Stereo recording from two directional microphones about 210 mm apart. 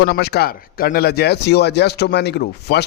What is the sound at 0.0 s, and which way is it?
Speech, 50° left (ahead or behind).